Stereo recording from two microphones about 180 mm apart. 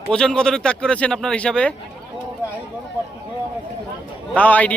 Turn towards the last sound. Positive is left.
turn(degrees=10)  # may be behind; listen again after turning